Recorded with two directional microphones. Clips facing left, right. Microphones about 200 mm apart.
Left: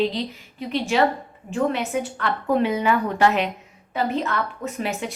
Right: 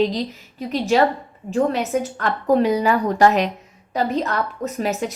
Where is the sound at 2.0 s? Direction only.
40° right (ahead or behind).